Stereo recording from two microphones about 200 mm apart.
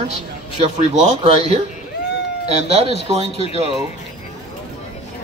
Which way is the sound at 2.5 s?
30° right (ahead or behind).